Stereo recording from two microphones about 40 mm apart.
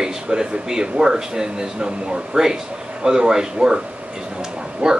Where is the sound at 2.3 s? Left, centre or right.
Centre.